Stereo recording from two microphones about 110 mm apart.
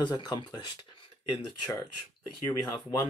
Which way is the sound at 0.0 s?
40° left (ahead or behind).